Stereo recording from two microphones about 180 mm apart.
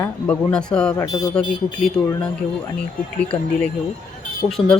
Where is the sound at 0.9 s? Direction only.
20° left (ahead or behind).